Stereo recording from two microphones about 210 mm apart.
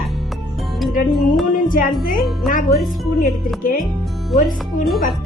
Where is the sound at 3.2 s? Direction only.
40° left (ahead or behind).